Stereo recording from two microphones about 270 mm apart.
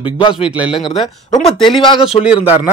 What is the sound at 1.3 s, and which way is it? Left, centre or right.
Speech, left.